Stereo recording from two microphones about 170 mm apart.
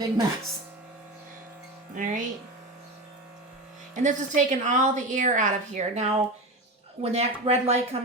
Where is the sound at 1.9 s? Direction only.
50° right (ahead or behind).